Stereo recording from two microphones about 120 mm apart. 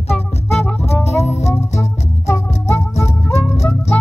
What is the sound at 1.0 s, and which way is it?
Music, 65° left (ahead or behind).